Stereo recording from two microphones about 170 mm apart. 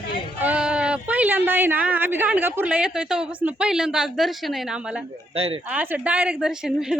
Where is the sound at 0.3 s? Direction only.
10° right (ahead or behind).